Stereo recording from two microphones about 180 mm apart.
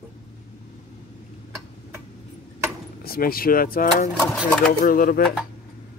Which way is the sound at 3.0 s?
55° left (ahead or behind).